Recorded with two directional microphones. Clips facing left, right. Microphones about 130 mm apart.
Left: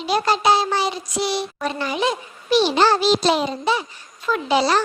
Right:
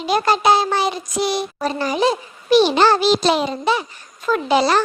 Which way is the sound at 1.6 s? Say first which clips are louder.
Right 4 dB; 35° right (ahead or behind).